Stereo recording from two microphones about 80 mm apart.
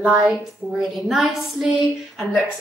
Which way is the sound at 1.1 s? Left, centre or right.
Centre.